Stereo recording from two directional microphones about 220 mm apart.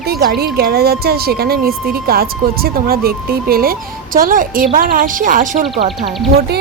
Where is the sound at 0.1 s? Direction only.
45° right (ahead or behind).